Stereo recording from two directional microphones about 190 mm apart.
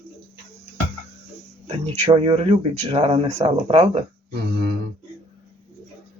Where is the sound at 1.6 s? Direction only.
30° right (ahead or behind).